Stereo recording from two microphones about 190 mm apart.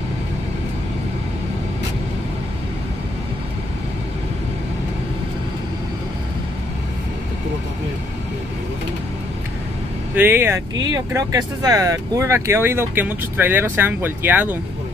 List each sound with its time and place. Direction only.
10.1 s speech: 10° right (ahead or behind)